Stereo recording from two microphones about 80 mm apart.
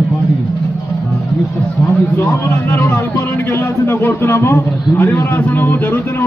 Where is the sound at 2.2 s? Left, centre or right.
Left.